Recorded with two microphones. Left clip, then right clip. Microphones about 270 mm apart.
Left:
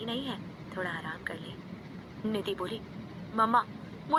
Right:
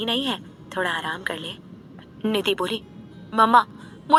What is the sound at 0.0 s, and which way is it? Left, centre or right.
A woman's voice, right.